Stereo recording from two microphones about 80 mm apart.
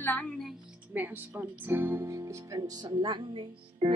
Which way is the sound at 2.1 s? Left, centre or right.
Right.